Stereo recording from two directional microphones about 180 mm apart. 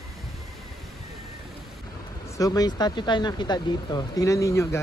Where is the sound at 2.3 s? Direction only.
20° left (ahead or behind).